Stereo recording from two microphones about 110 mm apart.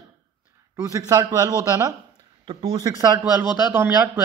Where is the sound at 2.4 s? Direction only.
45° right (ahead or behind).